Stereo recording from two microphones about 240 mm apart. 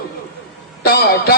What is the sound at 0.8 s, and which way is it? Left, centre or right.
Speech, left.